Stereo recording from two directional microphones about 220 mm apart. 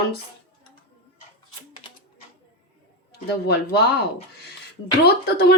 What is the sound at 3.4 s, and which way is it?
Speech, 45° left (ahead or behind).